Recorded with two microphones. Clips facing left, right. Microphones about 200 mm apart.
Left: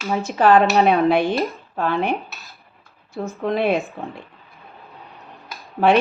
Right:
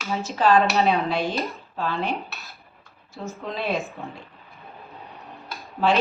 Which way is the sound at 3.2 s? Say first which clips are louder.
Left 8 dB; 55° left (ahead or behind).